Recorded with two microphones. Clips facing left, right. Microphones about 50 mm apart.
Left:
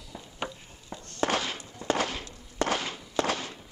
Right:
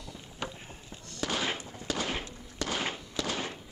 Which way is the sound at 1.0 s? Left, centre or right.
Left.